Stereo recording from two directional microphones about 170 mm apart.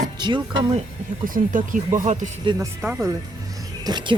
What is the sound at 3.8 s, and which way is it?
Speech, 25° right (ahead or behind).